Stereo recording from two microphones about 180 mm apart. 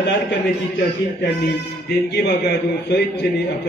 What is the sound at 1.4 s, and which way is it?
A man's voice, 65° left (ahead or behind).